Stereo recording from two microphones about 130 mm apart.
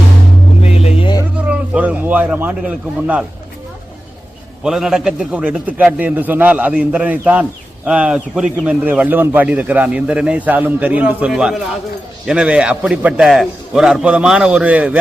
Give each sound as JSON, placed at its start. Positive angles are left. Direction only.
{"t": 0.6, "sound": "music", "side_deg": 55}
{"t": 1.5, "sound": "a man's voice", "side_deg": -10}
{"t": 4.6, "sound": "a man's voice", "side_deg": -5}